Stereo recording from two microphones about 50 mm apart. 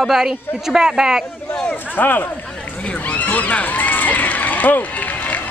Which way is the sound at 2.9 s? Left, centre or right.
Left.